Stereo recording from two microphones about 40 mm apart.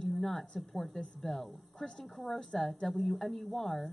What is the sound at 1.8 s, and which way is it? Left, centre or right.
Speech, centre.